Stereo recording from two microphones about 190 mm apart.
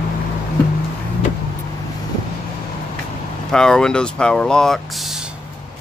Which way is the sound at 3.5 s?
5° left (ahead or behind).